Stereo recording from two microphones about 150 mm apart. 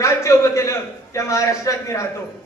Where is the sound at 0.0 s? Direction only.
20° left (ahead or behind).